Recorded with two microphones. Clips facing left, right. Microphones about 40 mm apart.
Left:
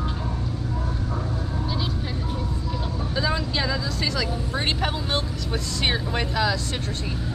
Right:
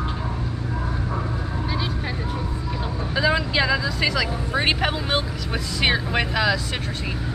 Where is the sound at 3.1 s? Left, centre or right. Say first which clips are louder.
Right 5 dB; right.